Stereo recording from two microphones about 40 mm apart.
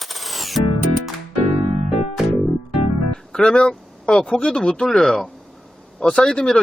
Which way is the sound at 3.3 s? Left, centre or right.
Left.